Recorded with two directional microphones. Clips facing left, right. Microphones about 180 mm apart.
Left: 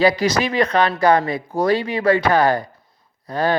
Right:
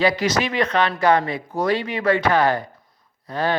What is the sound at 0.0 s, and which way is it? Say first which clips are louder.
Speech: left 3 dB; 35° left (ahead or behind).